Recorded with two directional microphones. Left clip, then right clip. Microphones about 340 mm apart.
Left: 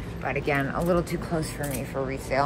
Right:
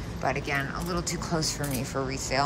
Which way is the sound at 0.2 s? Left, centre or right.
Centre.